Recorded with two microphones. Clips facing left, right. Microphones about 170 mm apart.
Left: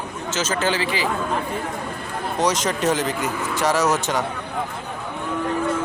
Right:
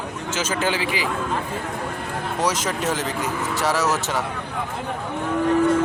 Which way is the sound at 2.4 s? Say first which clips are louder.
Left 3 dB; 5° right (ahead or behind).